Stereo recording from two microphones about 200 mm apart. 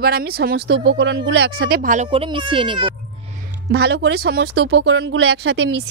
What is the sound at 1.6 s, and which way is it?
Speech, 45° right (ahead or behind).